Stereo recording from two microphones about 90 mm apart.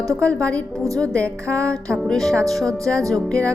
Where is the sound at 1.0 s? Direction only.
15° left (ahead or behind).